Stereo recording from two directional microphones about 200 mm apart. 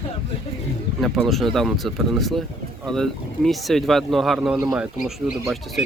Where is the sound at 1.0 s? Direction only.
Centre (ahead or behind).